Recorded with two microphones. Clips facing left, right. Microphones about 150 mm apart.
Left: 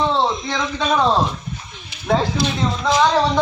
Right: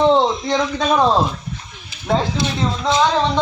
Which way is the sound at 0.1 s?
15° right (ahead or behind).